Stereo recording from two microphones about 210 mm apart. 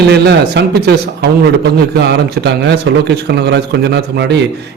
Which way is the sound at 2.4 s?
55° right (ahead or behind).